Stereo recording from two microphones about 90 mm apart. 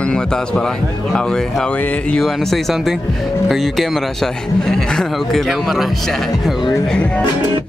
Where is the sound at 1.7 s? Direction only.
15° left (ahead or behind).